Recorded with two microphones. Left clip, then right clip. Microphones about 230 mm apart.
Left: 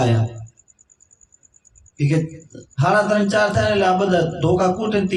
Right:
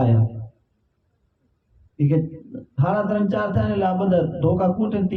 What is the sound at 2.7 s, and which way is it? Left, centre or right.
A man's voice, right.